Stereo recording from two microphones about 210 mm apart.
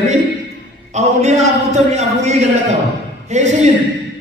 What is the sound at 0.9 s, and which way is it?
A man's voice, 35° right (ahead or behind).